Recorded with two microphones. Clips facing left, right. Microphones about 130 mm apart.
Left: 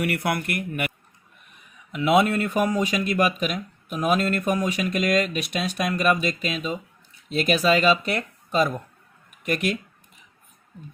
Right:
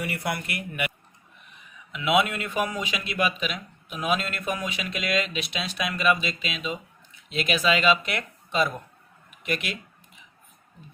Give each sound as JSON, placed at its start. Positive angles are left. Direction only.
{"t": 0.0, "sound": "speech", "side_deg": 60}
{"t": 1.9, "sound": "speech", "side_deg": 40}